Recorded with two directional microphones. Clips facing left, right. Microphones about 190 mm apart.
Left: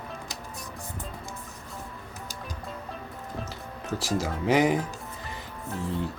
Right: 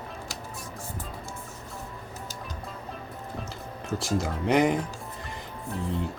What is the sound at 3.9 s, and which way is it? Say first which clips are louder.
Speech: even; centre (ahead or behind).